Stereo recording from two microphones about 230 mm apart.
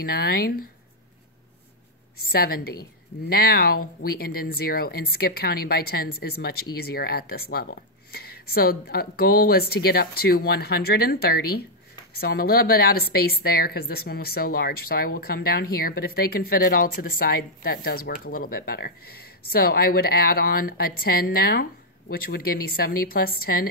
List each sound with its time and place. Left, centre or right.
0.0 s a woman's voice: left
2.3 s a woman's voice: left